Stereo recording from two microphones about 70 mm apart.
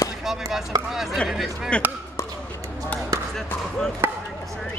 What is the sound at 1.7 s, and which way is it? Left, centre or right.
Speech, centre.